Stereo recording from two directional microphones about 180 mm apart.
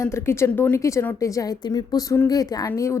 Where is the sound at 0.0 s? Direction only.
15° left (ahead or behind).